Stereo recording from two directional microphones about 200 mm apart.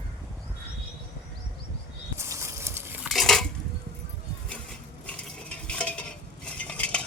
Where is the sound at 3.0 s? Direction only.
Centre (ahead or behind).